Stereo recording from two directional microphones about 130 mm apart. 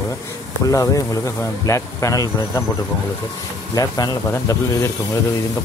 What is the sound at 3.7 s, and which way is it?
Speech, 30° left (ahead or behind).